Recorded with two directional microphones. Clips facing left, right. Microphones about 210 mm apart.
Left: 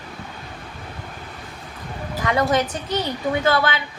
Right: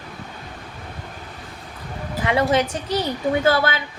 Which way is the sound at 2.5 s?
30° right (ahead or behind).